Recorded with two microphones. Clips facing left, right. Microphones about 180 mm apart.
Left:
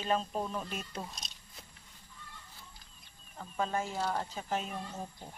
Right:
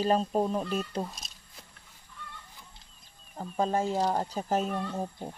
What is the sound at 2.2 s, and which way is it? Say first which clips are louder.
Fowl: right 8 dB; 65° right (ahead or behind).